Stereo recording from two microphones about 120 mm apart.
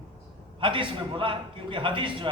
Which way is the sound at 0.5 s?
45° right (ahead or behind).